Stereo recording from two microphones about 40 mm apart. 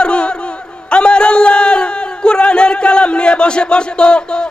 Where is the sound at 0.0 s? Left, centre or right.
Left.